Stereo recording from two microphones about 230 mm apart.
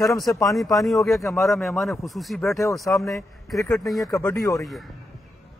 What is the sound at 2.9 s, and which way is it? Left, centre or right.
Speech, centre.